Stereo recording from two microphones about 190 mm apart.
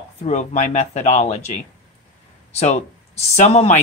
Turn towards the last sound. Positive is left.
turn(degrees=35)  # may be behind; listen again after turning